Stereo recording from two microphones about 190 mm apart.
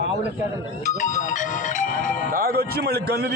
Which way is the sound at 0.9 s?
40° left (ahead or behind).